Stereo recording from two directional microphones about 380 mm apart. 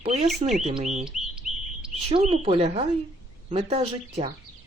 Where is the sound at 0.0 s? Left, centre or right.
Centre.